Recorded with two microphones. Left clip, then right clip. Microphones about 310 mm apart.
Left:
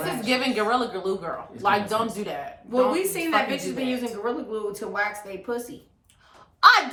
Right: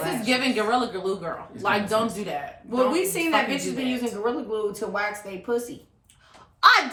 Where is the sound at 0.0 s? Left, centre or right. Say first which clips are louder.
Right 1 dB; centre.